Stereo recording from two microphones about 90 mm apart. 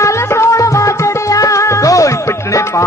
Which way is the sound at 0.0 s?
35° left (ahead or behind).